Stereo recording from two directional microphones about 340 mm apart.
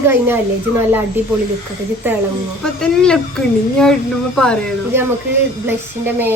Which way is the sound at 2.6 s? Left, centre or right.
Centre.